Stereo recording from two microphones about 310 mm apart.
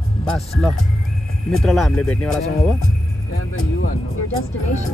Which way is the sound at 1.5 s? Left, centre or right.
Centre.